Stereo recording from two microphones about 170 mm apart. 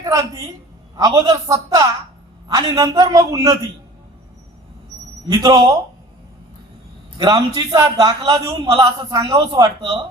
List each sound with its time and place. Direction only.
0.0 s a woman's voice: 20° right (ahead or behind)
2.5 s a man's voice: 20° right (ahead or behind)
5.3 s a man's voice: 20° right (ahead or behind)
7.2 s a man's voice: 20° right (ahead or behind)